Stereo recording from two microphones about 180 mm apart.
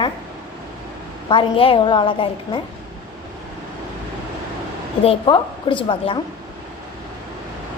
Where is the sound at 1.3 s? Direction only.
30° left (ahead or behind).